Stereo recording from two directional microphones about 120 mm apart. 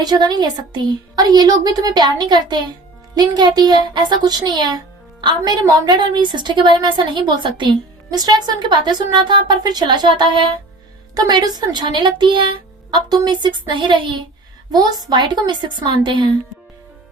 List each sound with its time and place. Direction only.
0.0 s speech: 35° right (ahead or behind)